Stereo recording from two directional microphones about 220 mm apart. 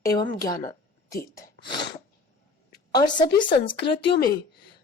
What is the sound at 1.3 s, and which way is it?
Sneeze, 15° left (ahead or behind).